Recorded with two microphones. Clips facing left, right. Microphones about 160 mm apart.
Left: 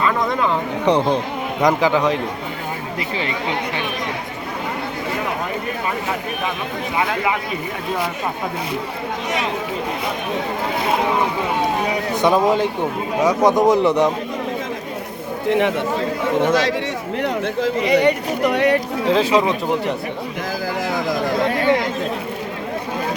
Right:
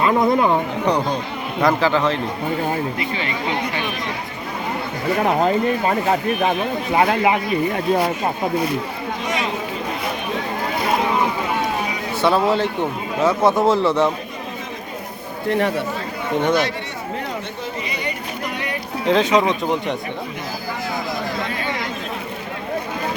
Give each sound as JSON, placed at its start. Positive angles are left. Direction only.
{"t": 0.0, "sound": "speech", "side_deg": -30}
{"t": 0.9, "sound": "a man's voice", "side_deg": 25}
{"t": 1.6, "sound": "speech", "side_deg": 15}
{"t": 12.2, "sound": "speech", "side_deg": 15}
{"t": 15.4, "sound": "speech", "side_deg": 0}
{"t": 16.5, "sound": "speech", "side_deg": 90}
{"t": 17.2, "sound": "speech", "side_deg": 75}
{"t": 19.0, "sound": "speech", "side_deg": 5}
{"t": 21.4, "sound": "chatter", "side_deg": 65}